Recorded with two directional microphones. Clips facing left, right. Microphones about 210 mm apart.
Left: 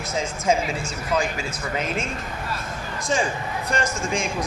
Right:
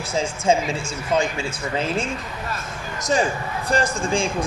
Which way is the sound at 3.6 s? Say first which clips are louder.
Right 4 dB; 35° right (ahead or behind).